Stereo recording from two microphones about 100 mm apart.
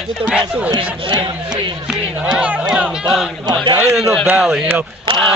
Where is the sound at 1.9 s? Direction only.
10° right (ahead or behind).